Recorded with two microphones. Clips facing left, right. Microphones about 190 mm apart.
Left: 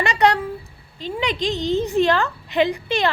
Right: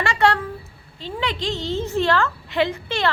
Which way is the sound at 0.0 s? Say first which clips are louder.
Left 1 dB; 20° left (ahead or behind).